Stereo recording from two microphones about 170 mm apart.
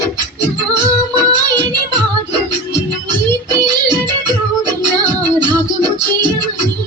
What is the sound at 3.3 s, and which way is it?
Music, 25° right (ahead or behind).